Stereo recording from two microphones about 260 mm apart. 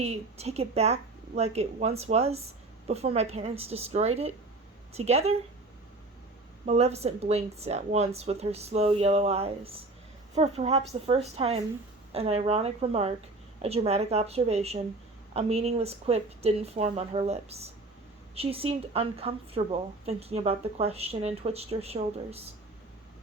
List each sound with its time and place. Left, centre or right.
0.0 s a woman's voice: right
6.7 s a woman's voice: right